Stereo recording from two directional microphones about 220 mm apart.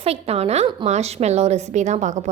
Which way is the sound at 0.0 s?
30° right (ahead or behind).